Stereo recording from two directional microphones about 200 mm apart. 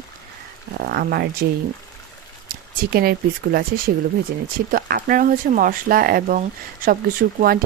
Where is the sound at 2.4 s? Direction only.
45° right (ahead or behind).